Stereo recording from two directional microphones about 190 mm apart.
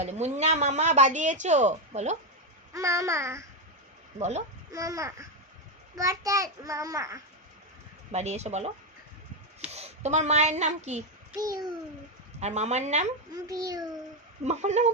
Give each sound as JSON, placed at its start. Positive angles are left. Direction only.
{"t": 0.0, "sound": "speech", "side_deg": -35}
{"t": 2.7, "sound": "a child's voice", "side_deg": -15}
{"t": 4.2, "sound": "speech", "side_deg": -35}
{"t": 4.7, "sound": "a child's voice", "side_deg": -15}
{"t": 8.1, "sound": "speech", "side_deg": -35}
{"t": 9.7, "sound": "speech", "side_deg": -35}
{"t": 11.3, "sound": "a child's voice", "side_deg": -20}
{"t": 12.4, "sound": "speech", "side_deg": -35}
{"t": 13.3, "sound": "a child's voice", "side_deg": -20}
{"t": 14.4, "sound": "speech", "side_deg": -35}